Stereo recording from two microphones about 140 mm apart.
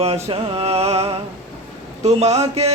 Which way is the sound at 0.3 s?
45° right (ahead or behind).